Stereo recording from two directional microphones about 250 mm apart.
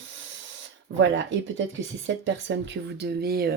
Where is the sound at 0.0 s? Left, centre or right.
Right.